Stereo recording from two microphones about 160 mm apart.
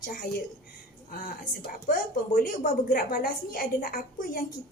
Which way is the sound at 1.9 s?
60° left (ahead or behind).